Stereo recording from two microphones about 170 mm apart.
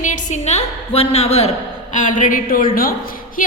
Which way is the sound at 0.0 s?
50° left (ahead or behind).